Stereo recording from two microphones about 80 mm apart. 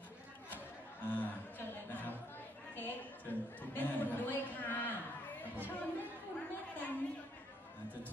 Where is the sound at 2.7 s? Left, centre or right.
Left.